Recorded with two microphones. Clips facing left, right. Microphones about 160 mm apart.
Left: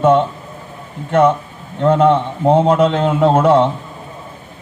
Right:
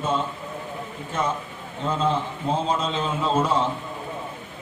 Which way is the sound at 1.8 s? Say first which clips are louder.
Left 12 dB; 65° left (ahead or behind).